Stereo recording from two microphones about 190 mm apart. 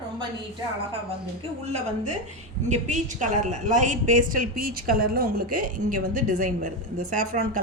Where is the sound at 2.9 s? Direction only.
40° right (ahead or behind).